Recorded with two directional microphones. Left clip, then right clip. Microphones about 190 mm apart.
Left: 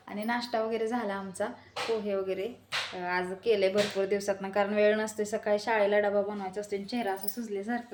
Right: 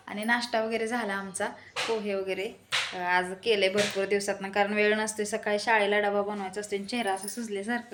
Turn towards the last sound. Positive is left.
turn(degrees=5)  # may be behind; listen again after turning